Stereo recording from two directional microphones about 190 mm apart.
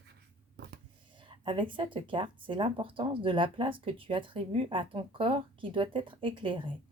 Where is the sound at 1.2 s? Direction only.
25° right (ahead or behind).